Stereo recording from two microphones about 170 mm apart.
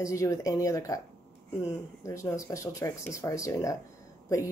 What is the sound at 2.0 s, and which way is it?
Speech, 15° left (ahead or behind).